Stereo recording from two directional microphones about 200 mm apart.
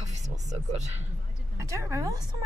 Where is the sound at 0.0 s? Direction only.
35° right (ahead or behind).